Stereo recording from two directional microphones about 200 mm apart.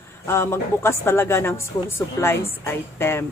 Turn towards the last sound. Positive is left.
turn(degrees=10)  # may be behind; listen again after turning